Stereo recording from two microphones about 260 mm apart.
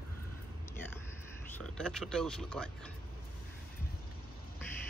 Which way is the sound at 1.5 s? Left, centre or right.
Centre.